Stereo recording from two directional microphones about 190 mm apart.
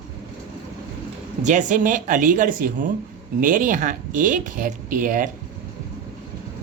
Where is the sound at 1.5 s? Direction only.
40° right (ahead or behind).